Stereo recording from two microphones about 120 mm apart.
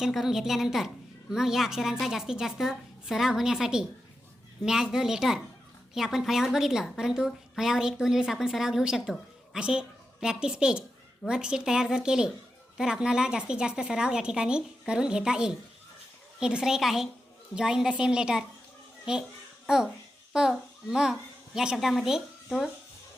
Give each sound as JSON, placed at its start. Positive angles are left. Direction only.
{"t": 0.0, "sound": "a woman's voice", "side_deg": -5}
{"t": 19.6, "sound": "a child's voice", "side_deg": -5}